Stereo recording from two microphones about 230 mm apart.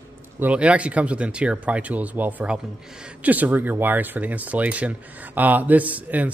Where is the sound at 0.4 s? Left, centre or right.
Centre.